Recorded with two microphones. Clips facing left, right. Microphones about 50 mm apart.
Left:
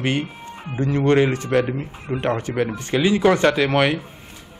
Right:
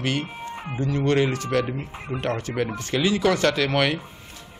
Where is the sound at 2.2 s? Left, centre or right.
Centre.